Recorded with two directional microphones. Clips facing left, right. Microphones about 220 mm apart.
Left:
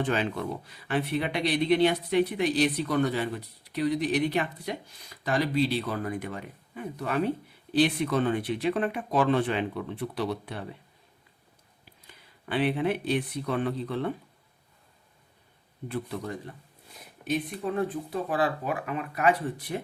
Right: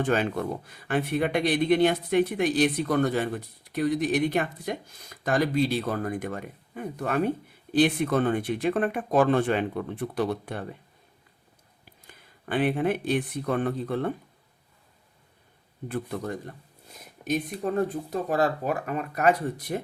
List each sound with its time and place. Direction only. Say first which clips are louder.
0.0 s speech: right 3 dB; 45° right (ahead or behind)
12.0 s speech: right 2 dB; 50° right (ahead or behind)
15.9 s speech: right 2 dB; 50° right (ahead or behind)